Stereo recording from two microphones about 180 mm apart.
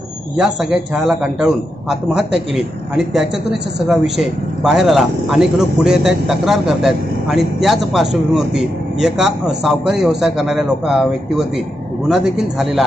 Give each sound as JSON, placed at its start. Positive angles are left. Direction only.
{"t": 0.4, "sound": "a man's voice", "side_deg": -5}
{"t": 3.9, "sound": "a man's voice", "side_deg": -5}